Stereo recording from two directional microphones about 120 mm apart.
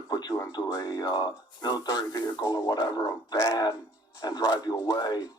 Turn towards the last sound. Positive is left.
turn(degrees=35)  # may be behind; listen again after turning